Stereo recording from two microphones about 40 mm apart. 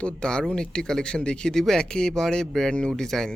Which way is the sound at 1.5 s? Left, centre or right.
Centre.